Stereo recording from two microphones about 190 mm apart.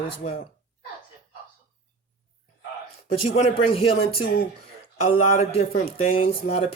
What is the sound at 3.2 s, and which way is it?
Speech, 30° left (ahead or behind).